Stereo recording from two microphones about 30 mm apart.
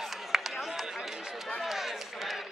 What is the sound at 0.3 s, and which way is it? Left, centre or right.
Run, centre.